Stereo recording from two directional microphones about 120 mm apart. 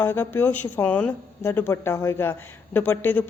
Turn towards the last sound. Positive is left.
turn(degrees=15)  # may be behind; listen again after turning